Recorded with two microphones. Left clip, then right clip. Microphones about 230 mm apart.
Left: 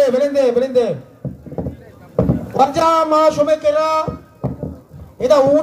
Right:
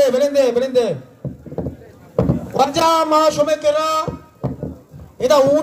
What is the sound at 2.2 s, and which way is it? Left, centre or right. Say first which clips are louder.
A woman's voice: left 2 dB; right.